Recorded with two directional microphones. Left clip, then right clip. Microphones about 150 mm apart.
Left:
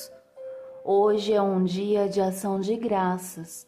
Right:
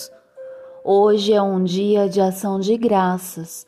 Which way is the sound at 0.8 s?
30° right (ahead or behind).